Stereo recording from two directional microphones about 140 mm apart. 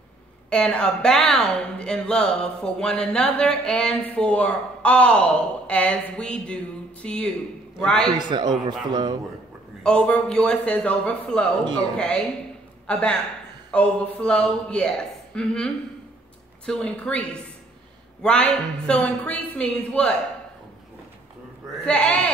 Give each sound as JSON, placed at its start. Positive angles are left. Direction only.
{"t": 0.5, "sound": "a woman's voice", "side_deg": 5}
{"t": 8.1, "sound": "a man's voice", "side_deg": -35}
{"t": 9.8, "sound": "a woman's voice", "side_deg": 10}
{"t": 12.8, "sound": "a man's voice", "side_deg": 5}
{"t": 21.8, "sound": "a woman's voice", "side_deg": 5}